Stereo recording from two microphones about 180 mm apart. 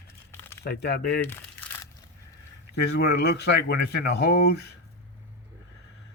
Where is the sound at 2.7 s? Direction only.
65° left (ahead or behind).